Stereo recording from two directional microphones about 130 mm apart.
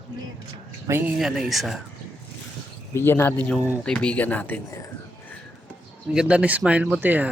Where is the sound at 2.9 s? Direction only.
15° left (ahead or behind).